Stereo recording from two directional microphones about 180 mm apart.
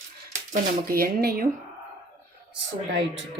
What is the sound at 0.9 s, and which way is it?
Speech, 55° right (ahead or behind).